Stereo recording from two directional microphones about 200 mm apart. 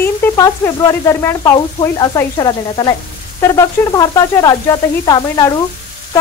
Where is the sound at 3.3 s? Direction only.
20° left (ahead or behind).